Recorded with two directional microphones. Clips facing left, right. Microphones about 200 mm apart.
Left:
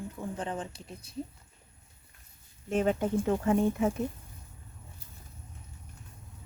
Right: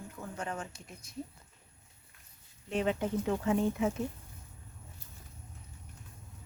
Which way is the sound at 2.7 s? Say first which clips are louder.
Left 4 dB; 45° left (ahead or behind).